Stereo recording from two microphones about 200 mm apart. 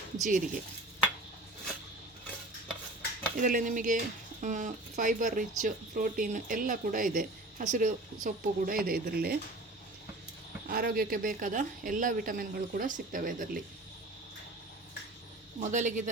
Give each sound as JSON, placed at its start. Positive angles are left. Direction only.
{"t": 0.3, "sound": "speech", "side_deg": -40}
{"t": 3.3, "sound": "speech", "side_deg": -45}
{"t": 10.7, "sound": "speech", "side_deg": -50}
{"t": 15.6, "sound": "speech", "side_deg": -40}